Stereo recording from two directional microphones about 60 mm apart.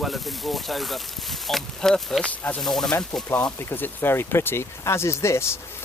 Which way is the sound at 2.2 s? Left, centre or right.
Left.